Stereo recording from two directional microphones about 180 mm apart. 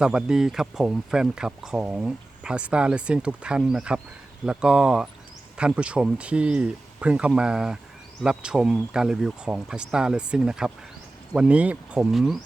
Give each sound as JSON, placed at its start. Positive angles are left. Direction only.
{"t": 0.0, "sound": "speech", "side_deg": -5}